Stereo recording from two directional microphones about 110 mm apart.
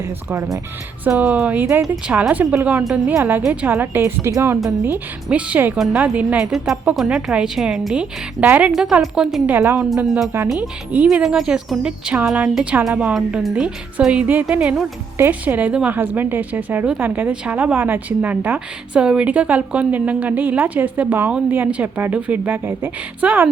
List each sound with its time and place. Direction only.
0.0 s a woman's voice: 25° right (ahead or behind)
1.6 s speech: 25° right (ahead or behind)
2.0 s a woman's voice: 10° right (ahead or behind)